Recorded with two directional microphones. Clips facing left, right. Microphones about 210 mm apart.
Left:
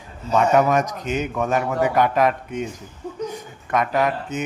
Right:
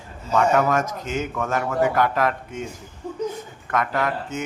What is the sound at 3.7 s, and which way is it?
Speech, 20° left (ahead or behind).